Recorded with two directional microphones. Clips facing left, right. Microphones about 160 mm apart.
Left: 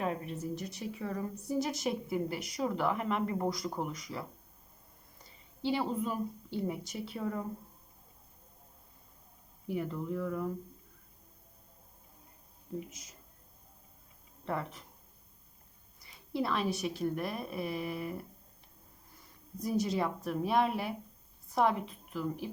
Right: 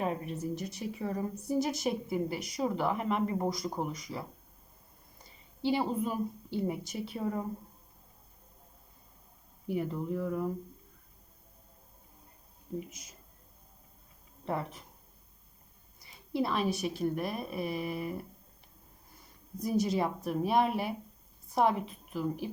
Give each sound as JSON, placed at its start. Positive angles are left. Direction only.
{"t": 0.0, "sound": "a woman's voice", "side_deg": -10}
{"t": 1.5, "sound": "a woman's voice", "side_deg": -5}
{"t": 3.2, "sound": "a woman's voice", "side_deg": -15}
{"t": 3.8, "sound": "a woman's voice", "side_deg": -5}
{"t": 5.6, "sound": "a woman's voice", "side_deg": -10}
{"t": 7.2, "sound": "speech", "side_deg": -20}
{"t": 9.7, "sound": "a woman's voice", "side_deg": -15}
{"t": 16.3, "sound": "a woman's voice", "side_deg": -10}
{"t": 19.6, "sound": "a woman's voice", "side_deg": -5}